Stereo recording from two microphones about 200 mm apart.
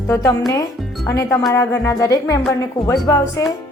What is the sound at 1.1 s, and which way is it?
Speech, 15° left (ahead or behind).